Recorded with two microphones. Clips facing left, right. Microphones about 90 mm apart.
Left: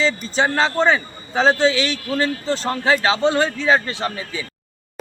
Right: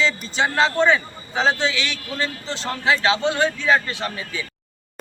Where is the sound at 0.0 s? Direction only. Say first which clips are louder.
Left 2 dB; 35° left (ahead or behind).